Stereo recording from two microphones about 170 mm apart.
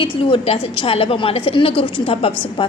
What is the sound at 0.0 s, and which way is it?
A woman's voice, 30° left (ahead or behind).